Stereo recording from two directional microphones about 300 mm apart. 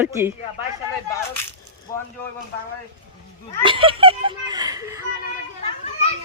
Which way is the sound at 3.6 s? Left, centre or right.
Centre.